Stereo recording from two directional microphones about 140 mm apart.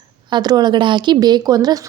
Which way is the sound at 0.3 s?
30° right (ahead or behind).